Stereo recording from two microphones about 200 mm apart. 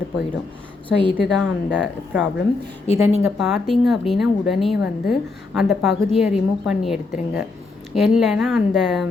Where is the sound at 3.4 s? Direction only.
Centre (ahead or behind).